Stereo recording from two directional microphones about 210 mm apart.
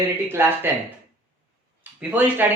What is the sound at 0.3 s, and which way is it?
Speech, 10° right (ahead or behind).